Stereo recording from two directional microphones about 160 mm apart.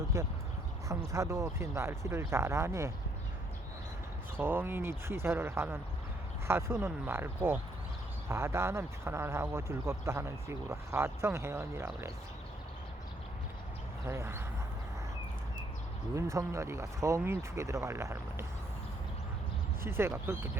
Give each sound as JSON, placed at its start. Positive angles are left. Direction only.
{"t": 0.1, "sound": "speech", "side_deg": -20}
{"t": 4.4, "sound": "speech", "side_deg": -15}
{"t": 14.0, "sound": "speech", "side_deg": -15}
{"t": 16.1, "sound": "speech", "side_deg": -20}
{"t": 19.8, "sound": "speech", "side_deg": -15}